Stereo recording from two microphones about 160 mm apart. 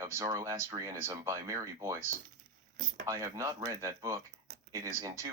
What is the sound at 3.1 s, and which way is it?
Speech, 20° right (ahead or behind).